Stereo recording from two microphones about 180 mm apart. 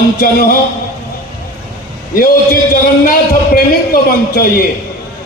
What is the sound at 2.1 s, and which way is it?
A man's voice, 50° left (ahead or behind).